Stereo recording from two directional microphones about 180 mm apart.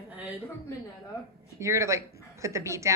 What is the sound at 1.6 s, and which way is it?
A woman's voice, 15° right (ahead or behind).